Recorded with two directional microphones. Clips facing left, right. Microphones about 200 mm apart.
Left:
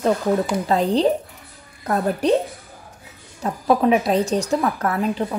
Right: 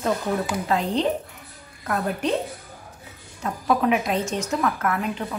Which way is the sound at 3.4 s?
35° left (ahead or behind).